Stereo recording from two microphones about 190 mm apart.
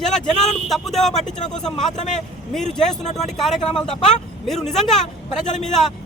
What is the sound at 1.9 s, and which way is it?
Speech, 40° left (ahead or behind).